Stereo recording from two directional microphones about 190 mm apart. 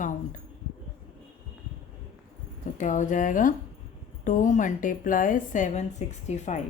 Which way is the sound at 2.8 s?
40° left (ahead or behind).